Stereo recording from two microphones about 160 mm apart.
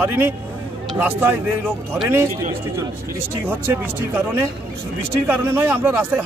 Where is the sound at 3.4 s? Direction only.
15° right (ahead or behind).